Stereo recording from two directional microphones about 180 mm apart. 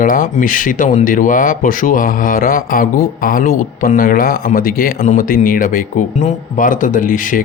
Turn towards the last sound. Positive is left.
turn(degrees=50)  # may be behind; listen again after turning